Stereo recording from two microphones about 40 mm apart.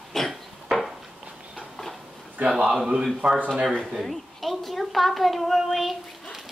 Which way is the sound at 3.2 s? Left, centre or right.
Right.